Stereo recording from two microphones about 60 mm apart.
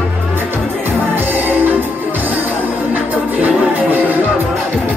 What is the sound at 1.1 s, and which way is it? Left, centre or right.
Music, right.